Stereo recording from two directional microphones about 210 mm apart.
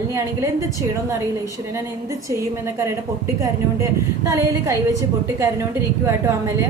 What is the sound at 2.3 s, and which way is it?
Speech, 15° right (ahead or behind).